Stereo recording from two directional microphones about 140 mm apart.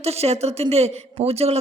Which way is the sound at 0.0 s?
50° right (ahead or behind).